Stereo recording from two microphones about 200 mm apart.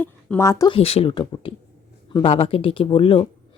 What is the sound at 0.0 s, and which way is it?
Speech, 10° left (ahead or behind).